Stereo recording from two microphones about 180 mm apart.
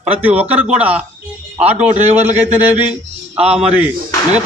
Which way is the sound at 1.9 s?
40° right (ahead or behind).